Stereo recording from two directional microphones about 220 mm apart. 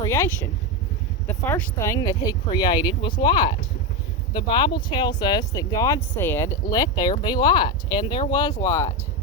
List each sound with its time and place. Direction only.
0.0 s speech: 10° left (ahead or behind)